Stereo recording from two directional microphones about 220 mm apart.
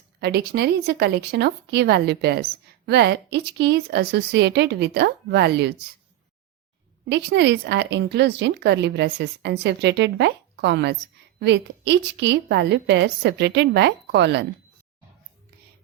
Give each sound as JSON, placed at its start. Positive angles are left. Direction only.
{"t": 0.2, "sound": "speech", "side_deg": -45}
{"t": 7.1, "sound": "speech", "side_deg": -50}